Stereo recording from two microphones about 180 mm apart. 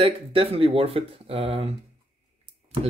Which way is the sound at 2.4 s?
30° right (ahead or behind).